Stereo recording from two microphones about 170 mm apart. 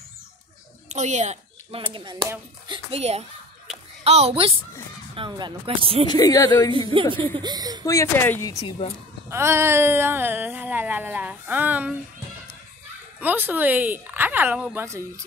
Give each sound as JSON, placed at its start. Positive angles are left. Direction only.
{"t": 0.9, "sound": "speech", "side_deg": -45}
{"t": 2.0, "sound": "speech", "side_deg": -30}
{"t": 6.0, "sound": "speech", "side_deg": 20}
{"t": 6.9, "sound": "speech", "side_deg": -30}
{"t": 7.8, "sound": "speech", "side_deg": 20}
{"t": 9.3, "sound": "a sound", "side_deg": -15}
{"t": 13.2, "sound": "a sound", "side_deg": -10}